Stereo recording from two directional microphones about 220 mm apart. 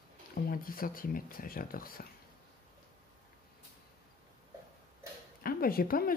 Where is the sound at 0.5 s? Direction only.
40° left (ahead or behind).